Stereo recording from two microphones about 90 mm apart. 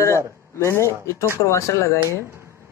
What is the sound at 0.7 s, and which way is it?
Speech, 30° left (ahead or behind).